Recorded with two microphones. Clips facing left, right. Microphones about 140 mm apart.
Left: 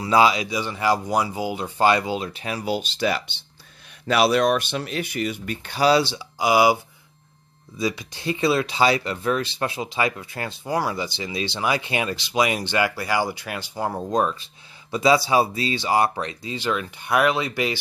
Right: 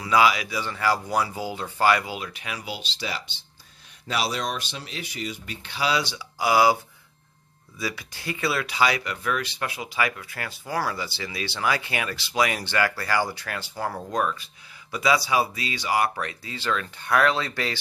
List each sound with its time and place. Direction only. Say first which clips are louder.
0.0 s speech: left 3 dB; 25° left (ahead or behind)